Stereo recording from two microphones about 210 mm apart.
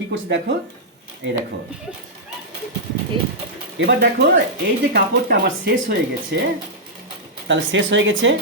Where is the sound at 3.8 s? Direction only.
65° right (ahead or behind).